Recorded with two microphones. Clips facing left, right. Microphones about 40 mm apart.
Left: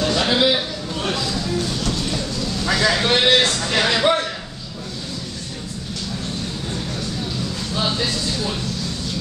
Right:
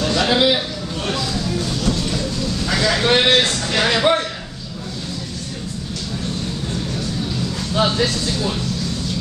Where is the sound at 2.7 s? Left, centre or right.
Centre.